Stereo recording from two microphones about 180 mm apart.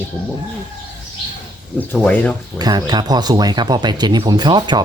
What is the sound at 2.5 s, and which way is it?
Speech, 20° right (ahead or behind).